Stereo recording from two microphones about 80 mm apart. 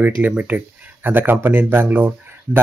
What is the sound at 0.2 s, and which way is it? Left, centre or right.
Speech, centre.